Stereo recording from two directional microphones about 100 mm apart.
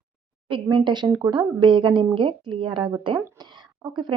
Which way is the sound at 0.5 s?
50° right (ahead or behind).